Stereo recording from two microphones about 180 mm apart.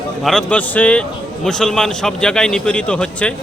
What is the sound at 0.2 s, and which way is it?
A man's voice, centre (ahead or behind).